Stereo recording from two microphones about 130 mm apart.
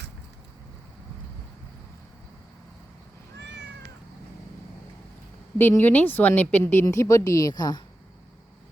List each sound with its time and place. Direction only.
5.5 s a woman's voice: 15° left (ahead or behind); by 7.8 s 30° left (ahead or behind)